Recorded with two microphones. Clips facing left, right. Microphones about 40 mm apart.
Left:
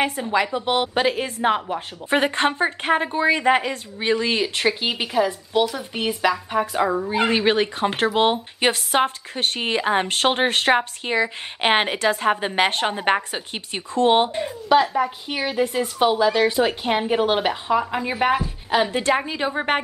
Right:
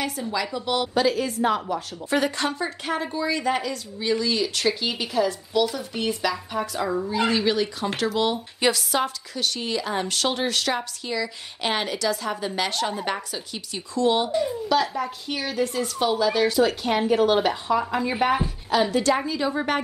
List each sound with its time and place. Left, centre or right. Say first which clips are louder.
0.0 s speech: left 6 dB; left